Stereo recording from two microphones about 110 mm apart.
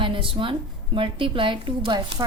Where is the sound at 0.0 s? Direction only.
50° right (ahead or behind).